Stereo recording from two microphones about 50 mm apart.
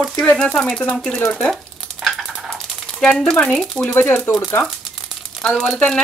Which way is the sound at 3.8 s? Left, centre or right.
Left.